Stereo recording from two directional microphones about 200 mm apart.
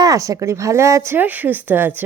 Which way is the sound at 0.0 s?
15° right (ahead or behind).